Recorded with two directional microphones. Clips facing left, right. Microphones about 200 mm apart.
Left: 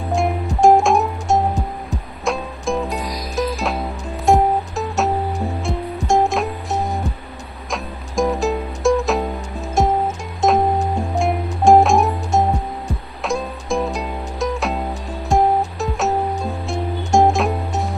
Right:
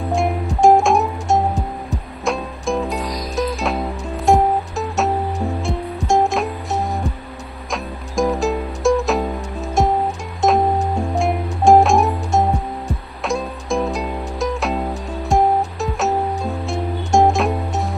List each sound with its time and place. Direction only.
0.0 s music: centre (ahead or behind)